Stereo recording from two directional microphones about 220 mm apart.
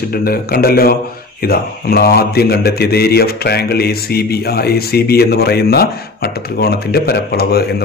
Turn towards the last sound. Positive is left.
turn(degrees=45)  # may be behind; listen again after turning